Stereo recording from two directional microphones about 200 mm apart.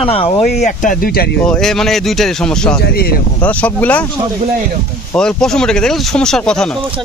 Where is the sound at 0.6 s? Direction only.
40° left (ahead or behind).